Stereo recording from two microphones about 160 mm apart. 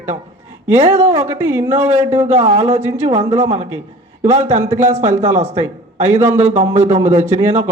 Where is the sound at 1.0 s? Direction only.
40° right (ahead or behind).